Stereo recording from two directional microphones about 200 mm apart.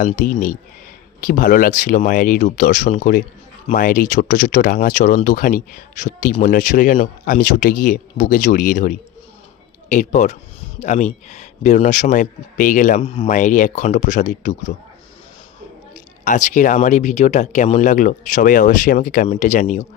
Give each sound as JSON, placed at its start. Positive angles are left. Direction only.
{"t": 0.0, "sound": "speech", "side_deg": 45}
{"t": 16.2, "sound": "speech", "side_deg": 40}